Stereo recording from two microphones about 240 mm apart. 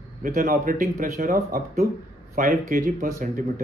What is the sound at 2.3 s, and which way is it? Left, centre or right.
Speech, right.